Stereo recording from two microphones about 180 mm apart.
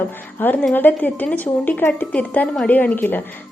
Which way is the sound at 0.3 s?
10° left (ahead or behind).